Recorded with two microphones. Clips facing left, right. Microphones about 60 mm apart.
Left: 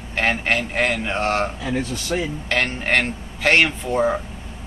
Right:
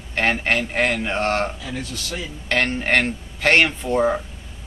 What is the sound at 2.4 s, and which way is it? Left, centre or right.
Speech, centre.